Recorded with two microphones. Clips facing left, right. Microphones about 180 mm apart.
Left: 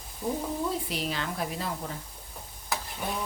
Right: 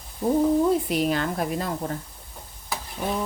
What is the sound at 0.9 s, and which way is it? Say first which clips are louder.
Speech: right 9 dB; 50° right (ahead or behind).